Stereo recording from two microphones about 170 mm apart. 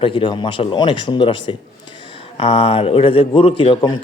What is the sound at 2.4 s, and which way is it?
A man's voice, 35° left (ahead or behind).